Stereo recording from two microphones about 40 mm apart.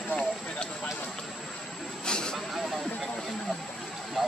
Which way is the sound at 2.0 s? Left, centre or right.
Centre.